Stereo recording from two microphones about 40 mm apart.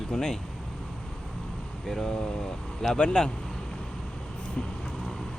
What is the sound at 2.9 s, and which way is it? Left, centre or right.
Speech, centre.